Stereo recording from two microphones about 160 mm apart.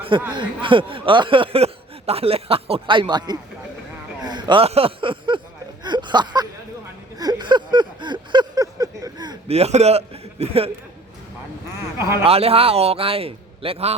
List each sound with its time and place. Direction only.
0.3 s speech: 30° right (ahead or behind)
5.8 s a sound: 30° right (ahead or behind)
9.5 s a man's voice: 40° right (ahead or behind)
11.9 s speech: 15° right (ahead or behind)
12.2 s speech: 40° right (ahead or behind)